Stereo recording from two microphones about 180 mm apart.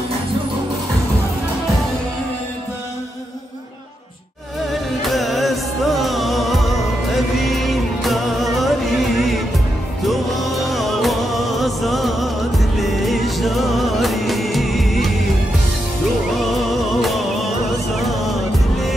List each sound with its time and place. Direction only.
5.0 s music: centre (ahead or behind)
16.5 s music: centre (ahead or behind)